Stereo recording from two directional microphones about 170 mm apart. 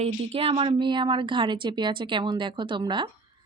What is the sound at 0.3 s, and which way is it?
A woman's voice, 30° right (ahead or behind).